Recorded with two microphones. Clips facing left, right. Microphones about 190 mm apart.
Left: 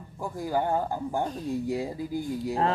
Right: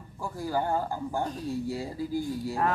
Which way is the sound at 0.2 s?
20° left (ahead or behind).